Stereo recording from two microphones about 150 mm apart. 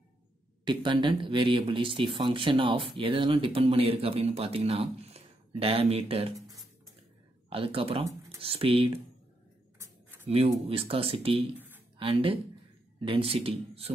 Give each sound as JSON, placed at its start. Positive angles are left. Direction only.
{"t": 0.7, "sound": "speech", "side_deg": -30}
{"t": 7.4, "sound": "speech", "side_deg": -40}
{"t": 10.7, "sound": "speech", "side_deg": -40}